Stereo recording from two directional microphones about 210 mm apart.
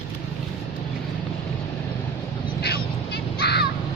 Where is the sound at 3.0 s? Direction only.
50° left (ahead or behind).